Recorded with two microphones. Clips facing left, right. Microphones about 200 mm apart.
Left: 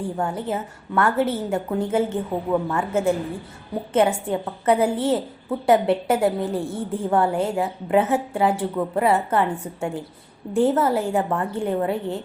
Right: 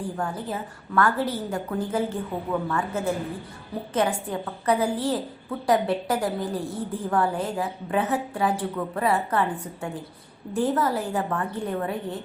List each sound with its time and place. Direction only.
0.2 s a woman's voice: 25° left (ahead or behind)